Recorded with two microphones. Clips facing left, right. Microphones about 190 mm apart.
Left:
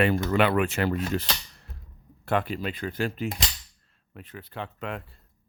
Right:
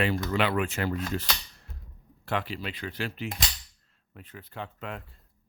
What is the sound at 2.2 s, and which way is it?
Speech, 50° left (ahead or behind).